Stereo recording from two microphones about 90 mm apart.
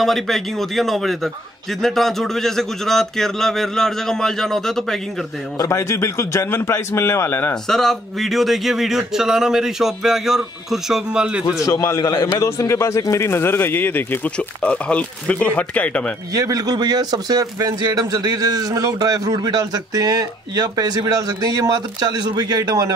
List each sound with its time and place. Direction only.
0.0 s speech: centre (ahead or behind)
5.6 s a man's voice: 30° left (ahead or behind)
7.6 s speech: 5° left (ahead or behind)
11.6 s a man's voice: 40° left (ahead or behind); by 16.1 s 15° left (ahead or behind)
16.3 s a man's voice: 45° right (ahead or behind)